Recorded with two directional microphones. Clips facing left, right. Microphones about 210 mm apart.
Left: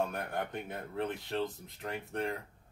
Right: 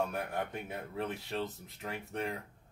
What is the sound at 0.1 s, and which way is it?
Speech, 5° right (ahead or behind).